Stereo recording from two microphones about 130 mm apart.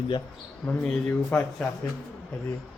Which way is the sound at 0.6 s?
10° left (ahead or behind).